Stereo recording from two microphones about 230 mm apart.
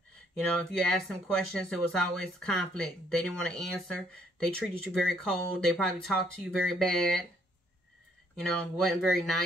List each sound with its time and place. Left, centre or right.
0.7 s speech: centre
8.4 s speech: centre